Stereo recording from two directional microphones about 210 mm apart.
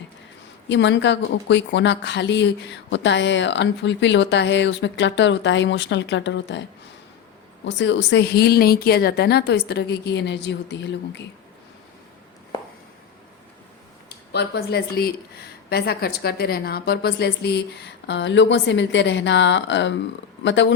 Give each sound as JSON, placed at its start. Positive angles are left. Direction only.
{"t": 0.7, "sound": "a woman's voice", "side_deg": 60}
{"t": 14.3, "sound": "a woman's voice", "side_deg": 50}